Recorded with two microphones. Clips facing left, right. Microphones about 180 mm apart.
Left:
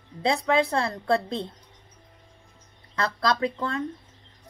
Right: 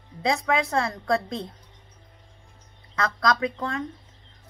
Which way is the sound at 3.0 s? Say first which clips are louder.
Even; 30° left (ahead or behind).